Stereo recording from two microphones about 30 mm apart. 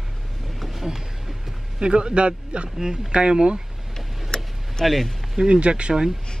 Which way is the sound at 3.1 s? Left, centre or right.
Right.